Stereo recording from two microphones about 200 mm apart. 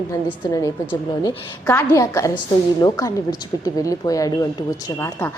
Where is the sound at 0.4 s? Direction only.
20° left (ahead or behind).